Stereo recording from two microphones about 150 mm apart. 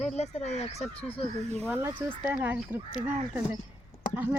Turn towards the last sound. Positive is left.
turn(degrees=-10)  # may be behind; listen again after turning